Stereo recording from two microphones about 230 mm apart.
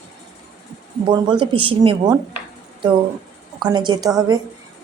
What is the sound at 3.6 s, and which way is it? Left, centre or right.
Speech, centre.